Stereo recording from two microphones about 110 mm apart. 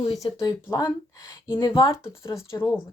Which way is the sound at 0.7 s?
35° left (ahead or behind).